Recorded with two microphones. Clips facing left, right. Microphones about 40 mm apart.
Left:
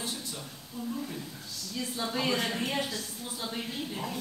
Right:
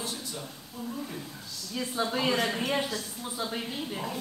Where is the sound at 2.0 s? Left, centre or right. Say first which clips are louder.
Right 3 dB; centre.